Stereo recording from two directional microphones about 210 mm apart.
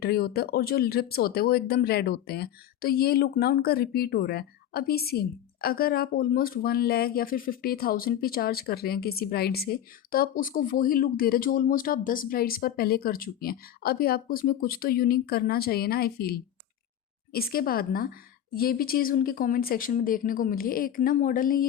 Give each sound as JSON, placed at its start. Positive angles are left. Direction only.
{"t": 0.0, "sound": "speech", "side_deg": 50}